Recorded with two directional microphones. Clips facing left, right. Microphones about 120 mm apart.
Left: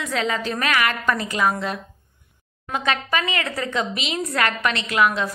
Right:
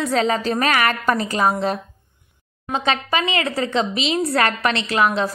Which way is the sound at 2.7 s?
30° right (ahead or behind).